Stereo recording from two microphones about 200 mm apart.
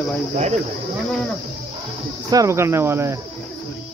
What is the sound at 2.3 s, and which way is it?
Speech, 15° right (ahead or behind).